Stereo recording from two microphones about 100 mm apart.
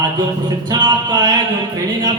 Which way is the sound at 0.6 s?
45° right (ahead or behind).